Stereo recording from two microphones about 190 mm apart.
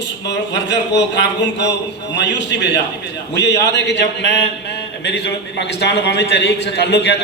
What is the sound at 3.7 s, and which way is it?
A man's voice, 65° left (ahead or behind).